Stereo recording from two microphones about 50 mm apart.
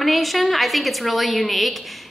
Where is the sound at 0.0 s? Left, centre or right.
Centre.